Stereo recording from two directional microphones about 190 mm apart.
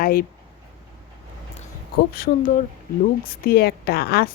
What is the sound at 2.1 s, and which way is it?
A woman's voice, 50° left (ahead or behind).